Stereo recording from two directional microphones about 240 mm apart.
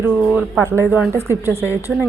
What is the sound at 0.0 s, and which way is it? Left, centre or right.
A woman's voice, centre.